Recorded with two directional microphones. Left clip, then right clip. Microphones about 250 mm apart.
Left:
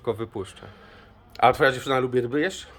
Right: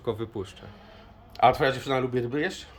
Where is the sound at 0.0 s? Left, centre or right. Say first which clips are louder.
Left 3 dB; centre.